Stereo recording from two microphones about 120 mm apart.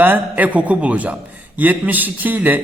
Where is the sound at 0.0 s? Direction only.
15° right (ahead or behind).